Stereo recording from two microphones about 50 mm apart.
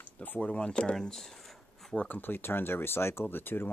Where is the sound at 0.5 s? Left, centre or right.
Centre.